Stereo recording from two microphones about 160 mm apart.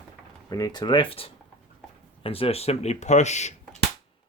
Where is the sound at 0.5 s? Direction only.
25° left (ahead or behind); by 3.5 s 45° left (ahead or behind).